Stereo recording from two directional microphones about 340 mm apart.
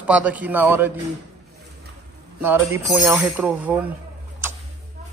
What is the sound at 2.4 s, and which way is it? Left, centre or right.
Speech, centre.